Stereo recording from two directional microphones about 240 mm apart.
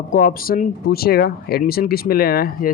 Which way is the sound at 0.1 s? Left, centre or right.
Left.